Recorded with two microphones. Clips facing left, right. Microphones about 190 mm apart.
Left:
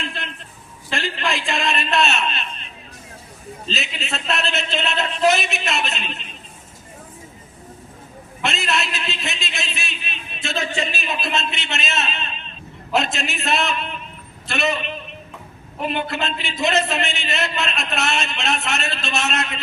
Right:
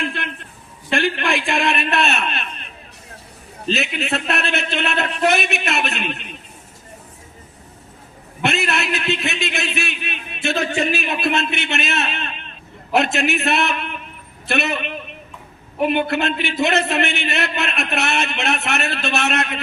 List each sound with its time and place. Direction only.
0.0 s a sound: 60° right (ahead or behind)
0.9 s a man's voice: 60° right (ahead or behind)
3.7 s a man's voice: 60° right (ahead or behind)
8.4 s a man's voice: 60° right (ahead or behind)